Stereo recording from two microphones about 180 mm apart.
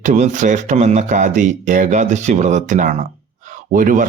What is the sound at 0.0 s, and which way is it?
Speech, 45° right (ahead or behind).